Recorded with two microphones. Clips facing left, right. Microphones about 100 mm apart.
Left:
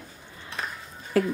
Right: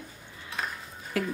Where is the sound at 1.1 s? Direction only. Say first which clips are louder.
Left 7 dB; 40° left (ahead or behind).